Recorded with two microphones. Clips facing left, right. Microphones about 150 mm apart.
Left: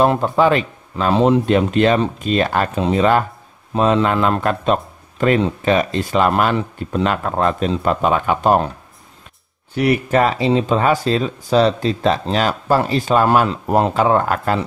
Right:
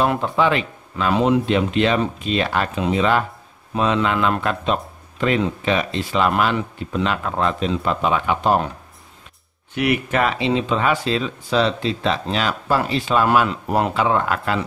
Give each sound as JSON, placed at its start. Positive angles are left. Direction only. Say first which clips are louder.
{"t": 0.0, "sound": "speech", "louder": "left 4 dB", "side_deg": 40}
{"t": 1.4, "sound": "speech", "louder": "left 4 dB", "side_deg": 45}
{"t": 9.8, "sound": "speech", "louder": "left 4 dB", "side_deg": 35}